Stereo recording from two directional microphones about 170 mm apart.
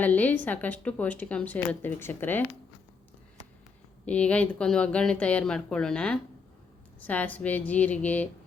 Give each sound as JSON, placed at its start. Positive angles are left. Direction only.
{"t": 0.0, "sound": "speech", "side_deg": 10}
{"t": 4.0, "sound": "speech", "side_deg": 5}